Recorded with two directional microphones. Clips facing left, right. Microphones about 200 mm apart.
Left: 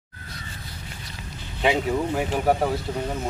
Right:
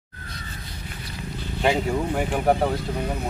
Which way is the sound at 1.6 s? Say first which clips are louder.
Even; centre (ahead or behind).